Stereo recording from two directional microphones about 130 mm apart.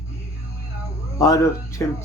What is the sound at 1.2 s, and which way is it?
Speech, 25° left (ahead or behind).